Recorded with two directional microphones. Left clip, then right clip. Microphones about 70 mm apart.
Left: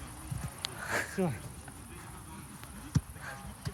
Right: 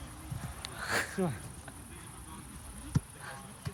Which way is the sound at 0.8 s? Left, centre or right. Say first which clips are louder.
Right 2 dB; right.